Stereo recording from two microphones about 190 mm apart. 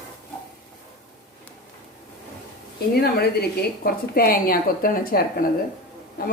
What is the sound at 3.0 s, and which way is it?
A woman's voice, 55° left (ahead or behind).